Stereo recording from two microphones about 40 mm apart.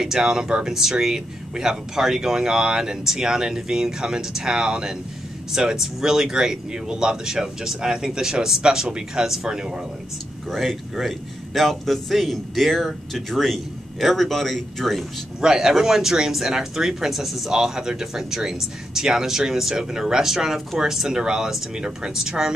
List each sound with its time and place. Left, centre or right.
0.0 s speech: centre
11.0 s a man's voice: centre
15.4 s speech: centre
17.5 s speech: centre